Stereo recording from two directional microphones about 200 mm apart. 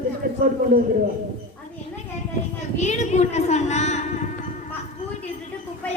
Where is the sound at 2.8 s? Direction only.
35° left (ahead or behind).